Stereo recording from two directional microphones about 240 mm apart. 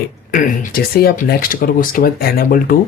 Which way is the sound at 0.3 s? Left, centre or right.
Left.